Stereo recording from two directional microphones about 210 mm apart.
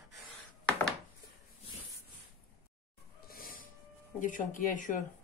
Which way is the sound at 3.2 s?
45° left (ahead or behind).